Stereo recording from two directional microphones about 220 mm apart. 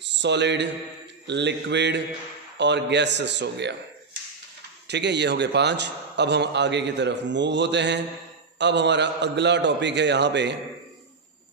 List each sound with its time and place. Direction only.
0.0 s a man's voice: 50° right (ahead or behind)
4.8 s a man's voice: 50° right (ahead or behind)